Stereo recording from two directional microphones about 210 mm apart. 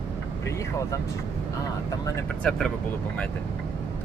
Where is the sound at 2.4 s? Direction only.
5° left (ahead or behind).